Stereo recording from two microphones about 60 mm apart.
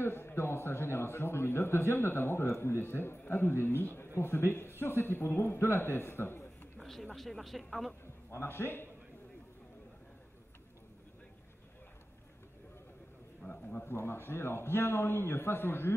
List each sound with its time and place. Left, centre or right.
0.0 s a man's voice: left
6.8 s a sound: centre
7.2 s speech: centre
8.3 s a man's voice: left
13.4 s a man's voice: left